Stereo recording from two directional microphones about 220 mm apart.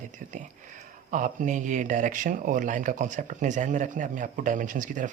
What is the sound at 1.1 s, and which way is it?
Speech, 35° right (ahead or behind).